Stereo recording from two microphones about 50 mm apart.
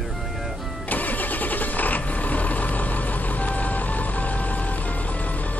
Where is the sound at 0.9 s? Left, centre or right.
Left.